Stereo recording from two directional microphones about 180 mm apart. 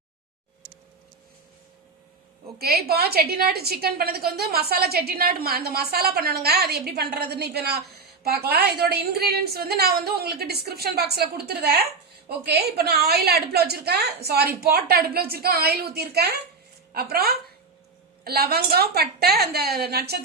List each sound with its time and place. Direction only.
2.6 s a woman's voice: 60° right (ahead or behind)